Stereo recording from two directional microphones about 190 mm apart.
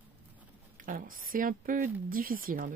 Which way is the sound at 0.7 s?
45° right (ahead or behind).